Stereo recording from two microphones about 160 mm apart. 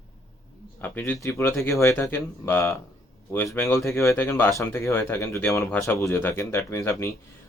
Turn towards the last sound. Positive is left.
turn(degrees=15)  # may be behind; listen again after turning